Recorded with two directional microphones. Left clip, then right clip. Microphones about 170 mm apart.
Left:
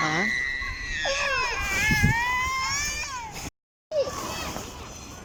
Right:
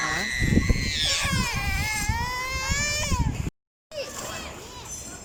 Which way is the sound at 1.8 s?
30° right (ahead or behind).